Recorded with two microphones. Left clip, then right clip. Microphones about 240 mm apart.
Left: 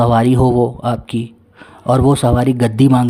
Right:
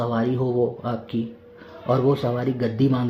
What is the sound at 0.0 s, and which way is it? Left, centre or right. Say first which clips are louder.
Speech: left 11 dB; left.